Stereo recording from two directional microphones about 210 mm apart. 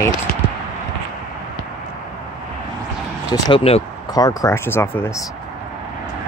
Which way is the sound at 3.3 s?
25° left (ahead or behind).